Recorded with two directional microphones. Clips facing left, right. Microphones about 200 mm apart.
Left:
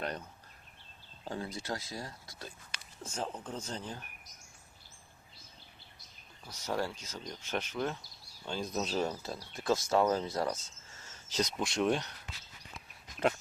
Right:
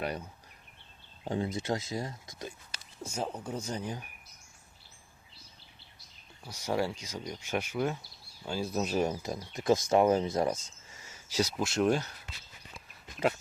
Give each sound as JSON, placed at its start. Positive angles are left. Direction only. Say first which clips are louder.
{"t": 0.0, "sound": "speech", "louder": "right 3 dB", "side_deg": -10}
{"t": 1.2, "sound": "speech", "louder": "right 7 dB", "side_deg": -20}
{"t": 3.0, "sound": "speech", "louder": "right 3 dB", "side_deg": -10}
{"t": 6.5, "sound": "speech", "louder": "right 4 dB", "side_deg": -10}